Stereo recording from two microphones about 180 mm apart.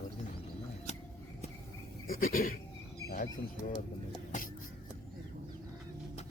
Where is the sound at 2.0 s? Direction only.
50° left (ahead or behind).